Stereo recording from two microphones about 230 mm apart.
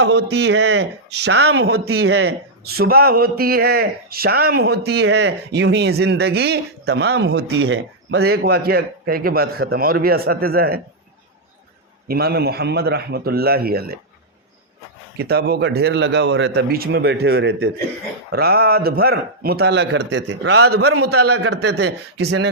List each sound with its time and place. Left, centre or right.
0.0 s speech: right
1.9 s speech: right
12.0 s speech: right
15.2 s speech: right
20.7 s a man's voice: right
21.5 s speech: right